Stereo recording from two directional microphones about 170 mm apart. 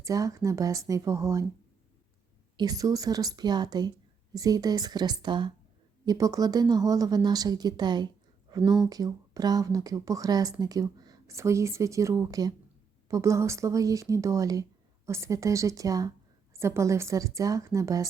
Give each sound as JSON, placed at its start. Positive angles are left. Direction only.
{"t": 0.0, "sound": "speech", "side_deg": -20}
{"t": 2.6, "sound": "speech", "side_deg": -20}